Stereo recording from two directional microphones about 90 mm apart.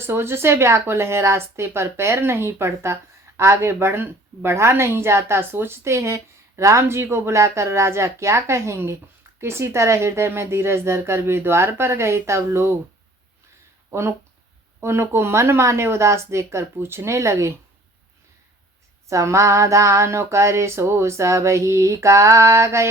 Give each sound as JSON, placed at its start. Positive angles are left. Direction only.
{"t": 0.0, "sound": "a woman's voice", "side_deg": -25}
{"t": 14.8, "sound": "a woman's voice", "side_deg": -30}
{"t": 19.0, "sound": "a sound", "side_deg": -35}